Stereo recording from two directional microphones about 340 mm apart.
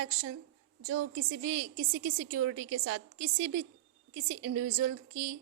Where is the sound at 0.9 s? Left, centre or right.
Right.